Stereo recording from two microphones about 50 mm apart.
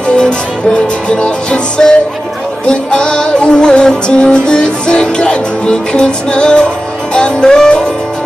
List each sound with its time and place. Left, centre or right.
0.1 s music: centre